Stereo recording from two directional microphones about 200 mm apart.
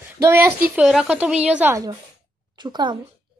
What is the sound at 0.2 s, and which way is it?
A woman's voice, 10° right (ahead or behind).